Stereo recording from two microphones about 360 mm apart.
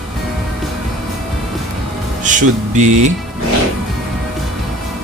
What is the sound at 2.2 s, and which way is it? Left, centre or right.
Speech, right.